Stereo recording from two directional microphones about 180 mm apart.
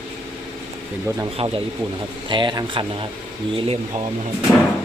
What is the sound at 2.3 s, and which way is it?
Speech, 25° right (ahead or behind).